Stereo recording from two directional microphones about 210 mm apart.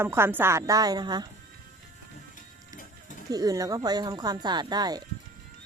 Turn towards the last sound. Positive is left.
turn(degrees=-20)  # may be behind; listen again after turning